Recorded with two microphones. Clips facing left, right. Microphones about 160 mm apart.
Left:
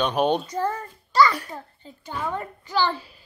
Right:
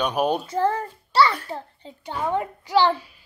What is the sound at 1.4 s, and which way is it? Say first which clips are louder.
Speech: right 4 dB; 25° right (ahead or behind).